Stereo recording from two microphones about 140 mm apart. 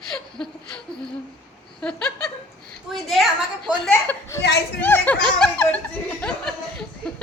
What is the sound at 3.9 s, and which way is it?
Speech, 20° left (ahead or behind).